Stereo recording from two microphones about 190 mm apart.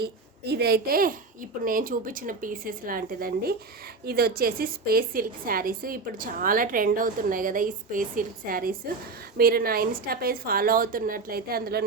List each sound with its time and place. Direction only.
0.0 s a woman's voice: 60° right (ahead or behind)